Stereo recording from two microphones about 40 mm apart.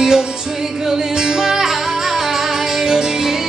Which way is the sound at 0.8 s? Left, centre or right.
Centre.